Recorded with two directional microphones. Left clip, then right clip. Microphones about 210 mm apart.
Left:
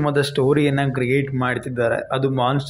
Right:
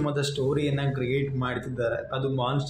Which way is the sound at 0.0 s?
35° left (ahead or behind).